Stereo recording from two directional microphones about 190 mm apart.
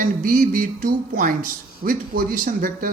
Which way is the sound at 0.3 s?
45° right (ahead or behind).